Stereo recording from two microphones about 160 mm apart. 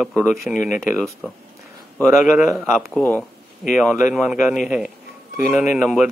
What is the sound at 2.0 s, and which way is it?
A man's voice, centre (ahead or behind).